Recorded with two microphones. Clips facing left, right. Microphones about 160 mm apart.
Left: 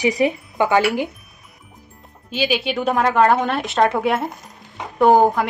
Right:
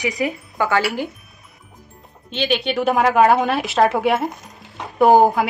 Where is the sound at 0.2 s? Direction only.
20° left (ahead or behind).